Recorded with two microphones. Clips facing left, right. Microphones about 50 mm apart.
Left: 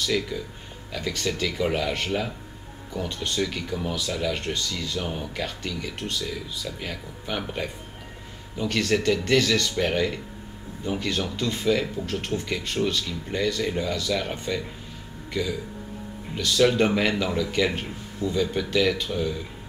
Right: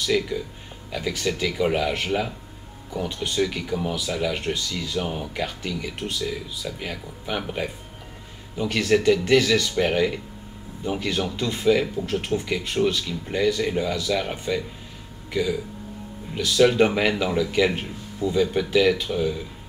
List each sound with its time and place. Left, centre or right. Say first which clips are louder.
0.0 s speech: right 3 dB; centre